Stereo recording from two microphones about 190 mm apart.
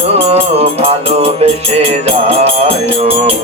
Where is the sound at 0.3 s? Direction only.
35° right (ahead or behind).